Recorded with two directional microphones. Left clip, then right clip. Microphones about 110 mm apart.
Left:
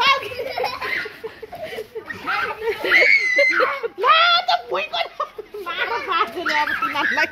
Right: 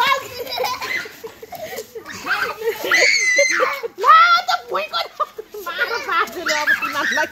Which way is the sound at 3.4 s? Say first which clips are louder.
Even; 30° right (ahead or behind).